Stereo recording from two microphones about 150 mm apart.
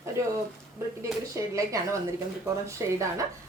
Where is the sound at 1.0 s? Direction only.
20° right (ahead or behind).